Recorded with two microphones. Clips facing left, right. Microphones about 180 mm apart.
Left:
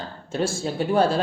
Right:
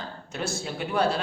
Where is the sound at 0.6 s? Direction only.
30° left (ahead or behind).